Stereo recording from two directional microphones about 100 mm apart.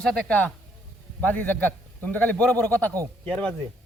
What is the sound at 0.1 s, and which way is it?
A man's voice, 15° left (ahead or behind).